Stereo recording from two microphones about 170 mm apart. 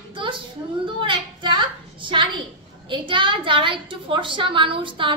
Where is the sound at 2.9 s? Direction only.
30° right (ahead or behind).